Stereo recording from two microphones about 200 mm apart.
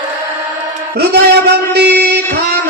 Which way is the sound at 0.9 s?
55° right (ahead or behind).